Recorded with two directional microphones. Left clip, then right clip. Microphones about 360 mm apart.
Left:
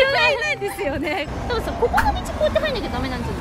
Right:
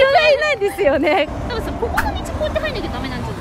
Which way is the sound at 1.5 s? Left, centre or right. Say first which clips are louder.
Left 2 dB; centre.